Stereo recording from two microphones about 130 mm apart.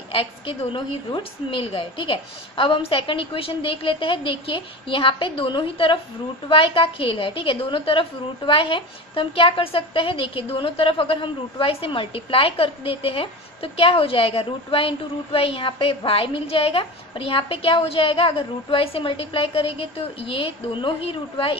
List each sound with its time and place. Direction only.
0.7 s a woman's voice: 40° left (ahead or behind)